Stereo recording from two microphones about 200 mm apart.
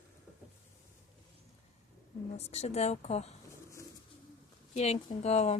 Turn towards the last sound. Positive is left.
turn(degrees=35)  # may be behind; listen again after turning